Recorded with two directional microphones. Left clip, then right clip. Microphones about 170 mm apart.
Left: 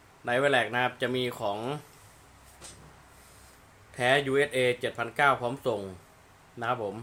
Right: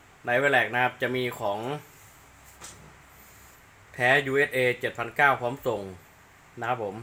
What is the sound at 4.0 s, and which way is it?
Speech, centre (ahead or behind).